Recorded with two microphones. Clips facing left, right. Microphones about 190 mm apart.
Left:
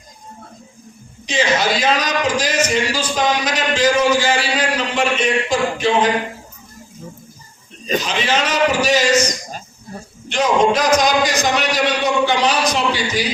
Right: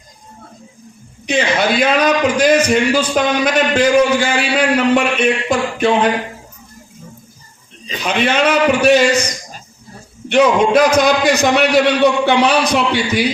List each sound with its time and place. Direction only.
1.3 s a man's voice: 60° right (ahead or behind)
8.0 s a man's voice: 60° right (ahead or behind)
10.2 s a man's voice: 60° right (ahead or behind)